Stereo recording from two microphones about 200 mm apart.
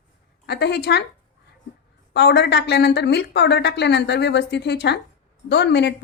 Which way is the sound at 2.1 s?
60° left (ahead or behind).